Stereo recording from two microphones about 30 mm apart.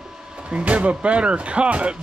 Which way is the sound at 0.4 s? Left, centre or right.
Right.